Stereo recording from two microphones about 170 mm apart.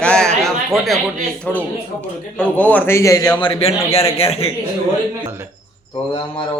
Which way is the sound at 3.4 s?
35° left (ahead or behind).